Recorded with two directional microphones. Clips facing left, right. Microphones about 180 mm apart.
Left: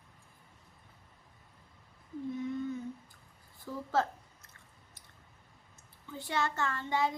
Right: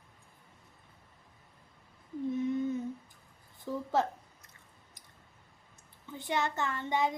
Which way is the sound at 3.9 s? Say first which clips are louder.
Right 1 dB; 20° right (ahead or behind).